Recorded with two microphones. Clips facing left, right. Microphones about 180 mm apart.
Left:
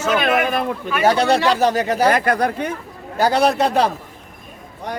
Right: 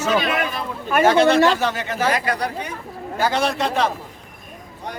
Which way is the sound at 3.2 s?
40° left (ahead or behind).